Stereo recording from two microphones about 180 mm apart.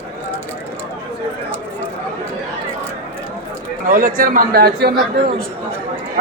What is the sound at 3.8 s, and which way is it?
A man's voice, 50° right (ahead or behind).